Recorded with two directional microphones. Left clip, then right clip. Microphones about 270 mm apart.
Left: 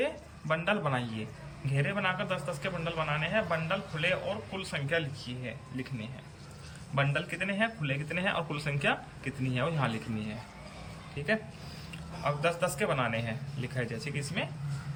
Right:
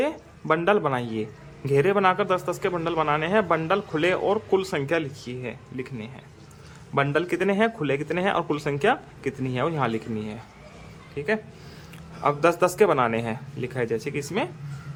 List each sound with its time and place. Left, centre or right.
0.0 s speech: centre
12.2 s speech: centre